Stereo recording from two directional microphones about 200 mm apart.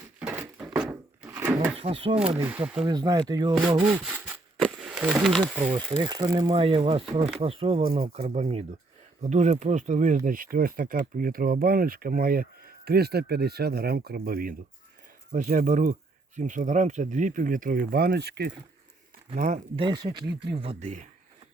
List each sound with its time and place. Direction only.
0.2 s a sound: 10° right (ahead or behind)
1.7 s speech: 30° right (ahead or behind)
2.1 s speech: 5° right (ahead or behind)
2.8 s speech: 20° right (ahead or behind)
3.8 s a sound: 5° right (ahead or behind)
4.6 s speech: centre (ahead or behind)
6.0 s speech: 20° right (ahead or behind); by 18.5 s 55° right (ahead or behind)
19.4 s speech: 40° right (ahead or behind)
19.7 s speech: 20° right (ahead or behind)